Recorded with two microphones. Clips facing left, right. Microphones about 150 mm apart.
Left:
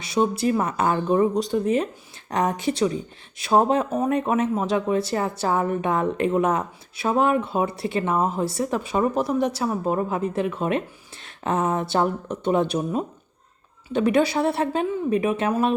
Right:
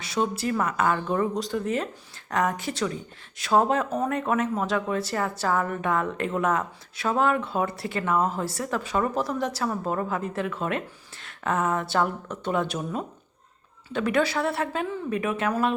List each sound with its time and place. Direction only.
0.2 s speech: 20° left (ahead or behind)